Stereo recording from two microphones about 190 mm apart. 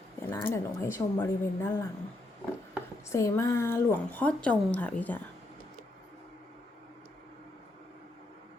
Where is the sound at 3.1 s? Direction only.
15° left (ahead or behind).